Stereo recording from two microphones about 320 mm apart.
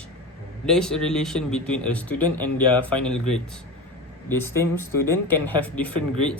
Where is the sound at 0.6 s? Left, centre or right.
Centre.